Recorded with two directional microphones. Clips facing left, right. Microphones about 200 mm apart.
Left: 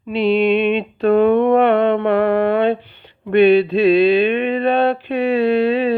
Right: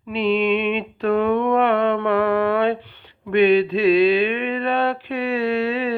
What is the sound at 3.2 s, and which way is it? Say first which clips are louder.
Mantra: left 4 dB; 35° left (ahead or behind).